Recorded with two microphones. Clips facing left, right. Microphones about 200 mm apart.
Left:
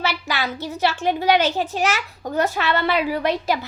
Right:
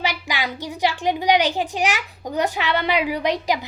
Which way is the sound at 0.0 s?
15° right (ahead or behind).